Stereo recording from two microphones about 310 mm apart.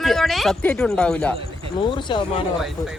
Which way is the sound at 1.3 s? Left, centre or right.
Centre.